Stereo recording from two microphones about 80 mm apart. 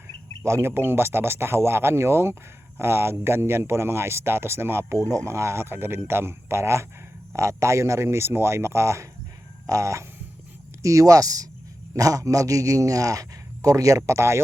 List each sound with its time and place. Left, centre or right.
0.4 s a man's voice: right